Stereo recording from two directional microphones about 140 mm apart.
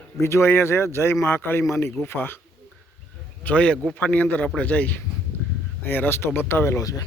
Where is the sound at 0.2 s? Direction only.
20° left (ahead or behind).